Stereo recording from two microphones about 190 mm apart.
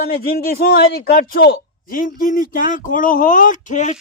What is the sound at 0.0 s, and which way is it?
Speech, 55° left (ahead or behind).